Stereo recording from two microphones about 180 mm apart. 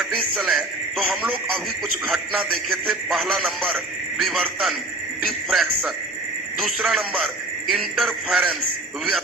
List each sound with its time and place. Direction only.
0.0 s a man's voice: centre (ahead or behind)